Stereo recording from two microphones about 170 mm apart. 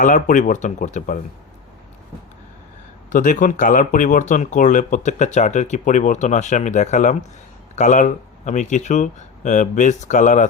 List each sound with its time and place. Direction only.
0.0 s speech: 50° left (ahead or behind)
3.1 s speech: 50° left (ahead or behind)